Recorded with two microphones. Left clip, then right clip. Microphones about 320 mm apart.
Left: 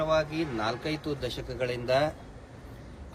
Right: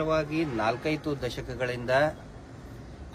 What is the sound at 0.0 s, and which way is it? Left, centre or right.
A man's voice, right.